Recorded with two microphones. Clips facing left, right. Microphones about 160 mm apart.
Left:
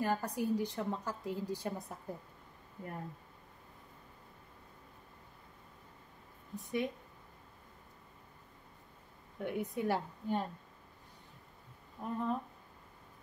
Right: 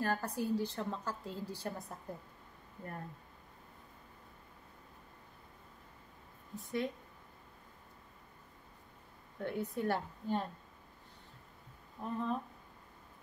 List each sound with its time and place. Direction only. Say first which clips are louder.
0.0 s a woman's voice: left 1 dB; 15° left (ahead or behind)
6.5 s a woman's voice: left 1 dB; 15° left (ahead or behind)
9.4 s a woman's voice: left 1 dB; 15° left (ahead or behind)
12.0 s a woman's voice: left 1 dB; 10° left (ahead or behind)